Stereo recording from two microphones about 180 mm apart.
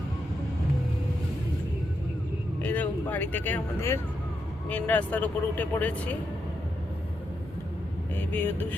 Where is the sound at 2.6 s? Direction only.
10° left (ahead or behind).